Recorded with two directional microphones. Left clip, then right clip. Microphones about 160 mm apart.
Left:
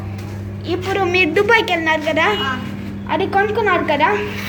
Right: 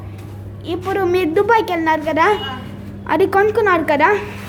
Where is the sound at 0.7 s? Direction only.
25° right (ahead or behind).